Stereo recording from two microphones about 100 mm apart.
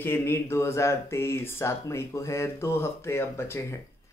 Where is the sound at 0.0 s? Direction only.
25° left (ahead or behind).